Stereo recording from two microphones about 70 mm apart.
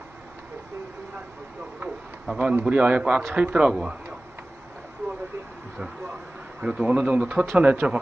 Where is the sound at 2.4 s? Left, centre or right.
Centre.